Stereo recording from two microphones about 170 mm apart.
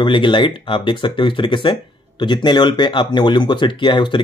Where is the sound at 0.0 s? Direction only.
30° left (ahead or behind).